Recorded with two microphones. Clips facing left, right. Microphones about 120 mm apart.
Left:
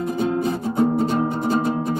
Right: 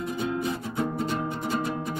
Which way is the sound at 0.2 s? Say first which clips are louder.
Left 8 dB; 35° left (ahead or behind).